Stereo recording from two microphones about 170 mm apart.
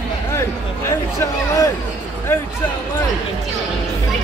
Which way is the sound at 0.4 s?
15° left (ahead or behind).